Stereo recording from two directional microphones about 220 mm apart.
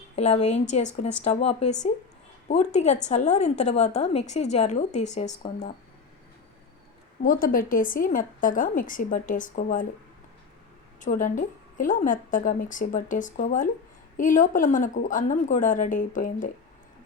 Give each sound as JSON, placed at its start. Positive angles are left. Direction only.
{"t": 0.2, "sound": "a woman's voice", "side_deg": 30}
{"t": 7.2, "sound": "a woman's voice", "side_deg": 40}
{"t": 11.0, "sound": "a woman's voice", "side_deg": 35}